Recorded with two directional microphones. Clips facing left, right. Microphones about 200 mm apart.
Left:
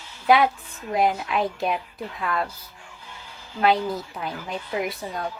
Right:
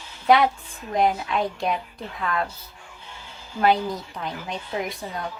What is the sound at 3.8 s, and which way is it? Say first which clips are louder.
Speech: left 1 dB; 5° left (ahead or behind).